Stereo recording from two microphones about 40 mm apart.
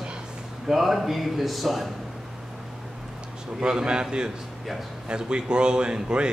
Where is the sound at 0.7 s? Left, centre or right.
Centre.